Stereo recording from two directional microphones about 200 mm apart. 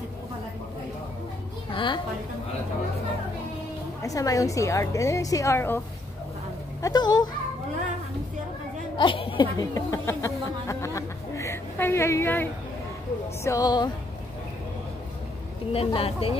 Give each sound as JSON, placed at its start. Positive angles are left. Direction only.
{"t": 1.7, "sound": "a sound", "side_deg": 25}
{"t": 4.0, "sound": "speech", "side_deg": 15}
{"t": 6.8, "sound": "speech", "side_deg": 20}
{"t": 8.9, "sound": "speech", "side_deg": 25}
{"t": 15.7, "sound": "speech", "side_deg": 30}